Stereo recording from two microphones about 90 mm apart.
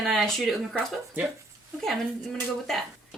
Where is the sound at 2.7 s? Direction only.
5° left (ahead or behind).